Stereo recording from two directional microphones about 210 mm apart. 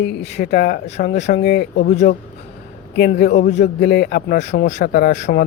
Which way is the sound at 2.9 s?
50° left (ahead or behind).